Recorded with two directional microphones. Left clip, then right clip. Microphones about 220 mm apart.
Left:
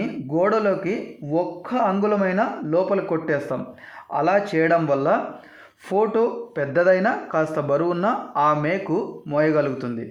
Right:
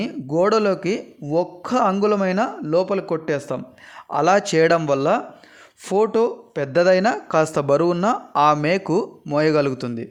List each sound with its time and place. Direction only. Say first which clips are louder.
0.3 s a man's voice: right 2 dB; 45° right (ahead or behind)